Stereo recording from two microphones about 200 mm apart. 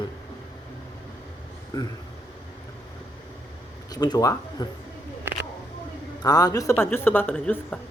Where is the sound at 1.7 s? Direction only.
20° left (ahead or behind).